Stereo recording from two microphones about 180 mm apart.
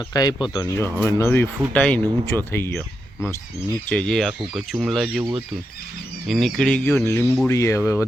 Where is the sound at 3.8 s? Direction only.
5° left (ahead or behind).